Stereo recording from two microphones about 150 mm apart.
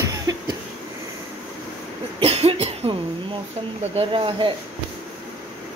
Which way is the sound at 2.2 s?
40° right (ahead or behind).